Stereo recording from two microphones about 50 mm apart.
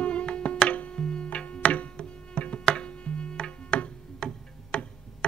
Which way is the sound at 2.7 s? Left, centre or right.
Left.